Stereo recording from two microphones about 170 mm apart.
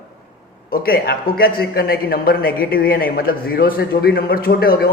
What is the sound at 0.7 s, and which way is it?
A man's voice, 65° left (ahead or behind).